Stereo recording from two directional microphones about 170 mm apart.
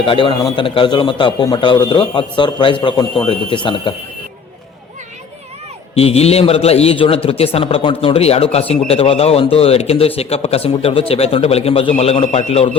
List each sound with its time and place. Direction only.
0.0 s a man's voice: 30° left (ahead or behind)
5.9 s a man's voice: 35° left (ahead or behind)